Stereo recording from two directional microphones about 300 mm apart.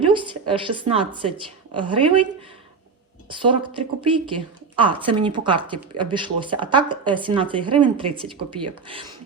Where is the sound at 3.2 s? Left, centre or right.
Centre.